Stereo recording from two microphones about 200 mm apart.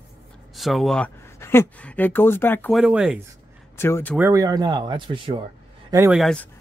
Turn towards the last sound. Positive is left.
turn(degrees=5)  # may be behind; listen again after turning